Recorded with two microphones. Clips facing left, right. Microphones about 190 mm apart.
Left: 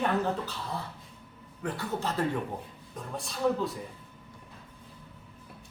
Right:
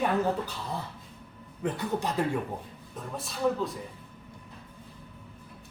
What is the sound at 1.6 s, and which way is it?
Speech, 20° right (ahead or behind).